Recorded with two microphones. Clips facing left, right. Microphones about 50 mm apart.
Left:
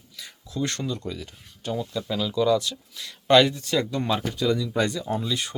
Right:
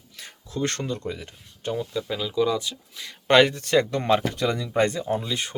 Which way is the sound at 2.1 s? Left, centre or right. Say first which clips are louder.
Left 2 dB; centre.